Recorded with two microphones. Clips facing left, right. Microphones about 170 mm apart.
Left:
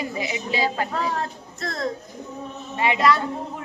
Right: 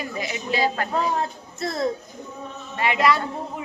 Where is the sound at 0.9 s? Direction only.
5° right (ahead or behind).